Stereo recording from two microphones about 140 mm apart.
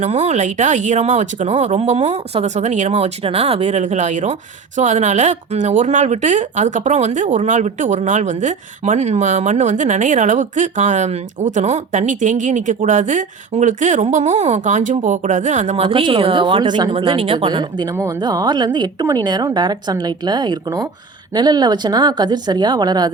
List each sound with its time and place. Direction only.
0.0 s speech: 55° right (ahead or behind)
15.8 s a woman's voice: 40° right (ahead or behind)